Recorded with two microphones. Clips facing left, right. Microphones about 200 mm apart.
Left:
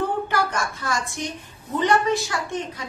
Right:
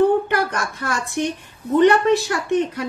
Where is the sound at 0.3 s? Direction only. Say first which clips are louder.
Right 2 dB; 60° right (ahead or behind).